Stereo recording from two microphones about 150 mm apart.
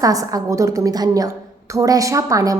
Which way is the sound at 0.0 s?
25° right (ahead or behind).